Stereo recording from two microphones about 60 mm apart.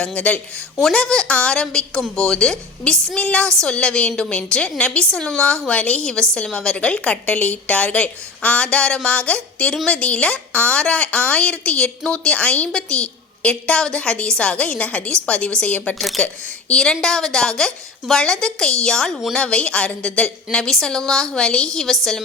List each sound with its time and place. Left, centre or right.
0.0 s a woman's voice: left
0.9 s a woman's voice: centre
4.4 s a woman's voice: centre
16.0 s a woman's voice: centre
16.2 s a woman's voice: centre